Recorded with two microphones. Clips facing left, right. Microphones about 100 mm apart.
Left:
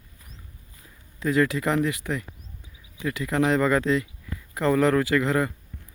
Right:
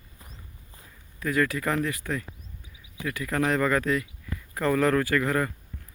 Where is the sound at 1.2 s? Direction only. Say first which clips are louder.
Left 3 dB; 20° left (ahead or behind).